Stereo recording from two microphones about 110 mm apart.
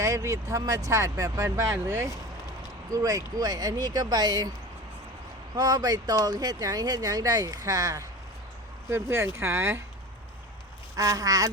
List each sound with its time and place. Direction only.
0.0 s speech: 25° right (ahead or behind)
5.5 s speech: 35° right (ahead or behind)
10.9 s speech: 35° right (ahead or behind)